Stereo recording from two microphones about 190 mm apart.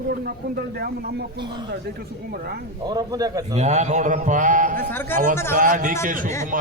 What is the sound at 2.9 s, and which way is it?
Speech, 20° right (ahead or behind).